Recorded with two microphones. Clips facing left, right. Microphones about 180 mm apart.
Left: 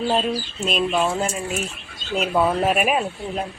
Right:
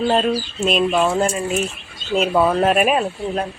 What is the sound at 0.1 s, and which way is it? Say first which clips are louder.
Speech: right 4 dB; centre (ahead or behind).